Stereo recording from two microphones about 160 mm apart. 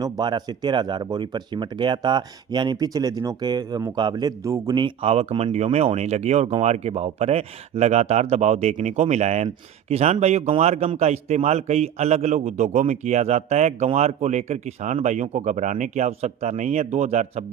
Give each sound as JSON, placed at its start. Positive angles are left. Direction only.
{"t": 0.0, "sound": "a man's voice", "side_deg": -25}